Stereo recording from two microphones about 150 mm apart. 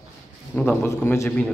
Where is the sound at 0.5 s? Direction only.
10° left (ahead or behind).